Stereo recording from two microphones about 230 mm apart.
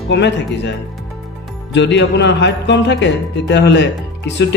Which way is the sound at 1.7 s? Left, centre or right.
Left.